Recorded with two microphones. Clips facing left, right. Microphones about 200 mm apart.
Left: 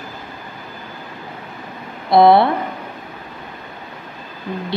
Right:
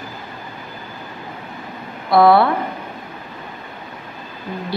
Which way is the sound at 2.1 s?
25° left (ahead or behind).